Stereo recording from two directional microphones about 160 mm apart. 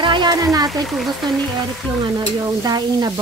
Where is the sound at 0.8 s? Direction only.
Centre (ahead or behind).